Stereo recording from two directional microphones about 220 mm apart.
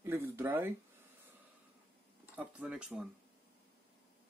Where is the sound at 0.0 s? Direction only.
10° right (ahead or behind).